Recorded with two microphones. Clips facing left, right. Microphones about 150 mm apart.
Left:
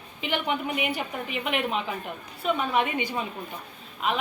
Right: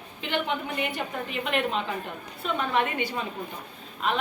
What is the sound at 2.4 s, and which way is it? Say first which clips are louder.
Speech: left 1 dB; 15° left (ahead or behind).